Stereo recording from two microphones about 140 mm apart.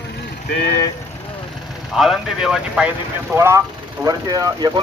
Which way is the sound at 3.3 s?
20° right (ahead or behind).